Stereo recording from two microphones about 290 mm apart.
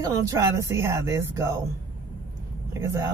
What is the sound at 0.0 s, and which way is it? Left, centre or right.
Speech, centre.